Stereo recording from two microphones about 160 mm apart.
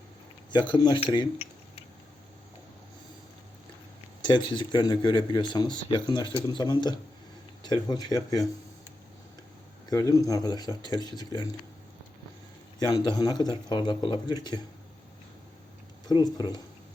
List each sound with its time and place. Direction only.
0.7 s speech: 25° left (ahead or behind)
4.2 s speech: 30° left (ahead or behind)
9.9 s speech: 20° left (ahead or behind)
12.8 s speech: 25° left (ahead or behind)
16.0 s speech: 25° left (ahead or behind)